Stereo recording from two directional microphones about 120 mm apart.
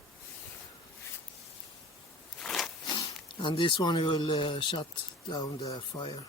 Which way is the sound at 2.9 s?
40° left (ahead or behind).